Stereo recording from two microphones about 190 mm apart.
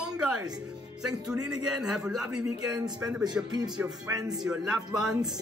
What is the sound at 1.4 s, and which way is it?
A man's voice, 5° right (ahead or behind).